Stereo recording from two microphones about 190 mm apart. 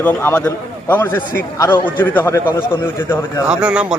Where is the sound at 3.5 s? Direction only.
5° right (ahead or behind).